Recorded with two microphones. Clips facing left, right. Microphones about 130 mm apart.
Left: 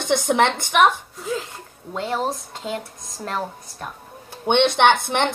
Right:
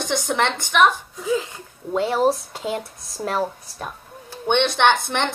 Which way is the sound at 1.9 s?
10° right (ahead or behind).